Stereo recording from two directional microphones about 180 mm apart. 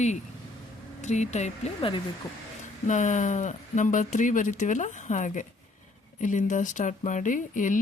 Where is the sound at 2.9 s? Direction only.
45° left (ahead or behind).